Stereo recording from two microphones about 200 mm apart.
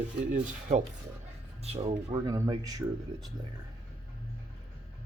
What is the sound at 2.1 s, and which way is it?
Speech, 15° right (ahead or behind).